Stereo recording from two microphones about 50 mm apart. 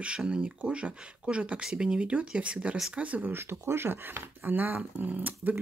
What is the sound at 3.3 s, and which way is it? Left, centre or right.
Speech, right.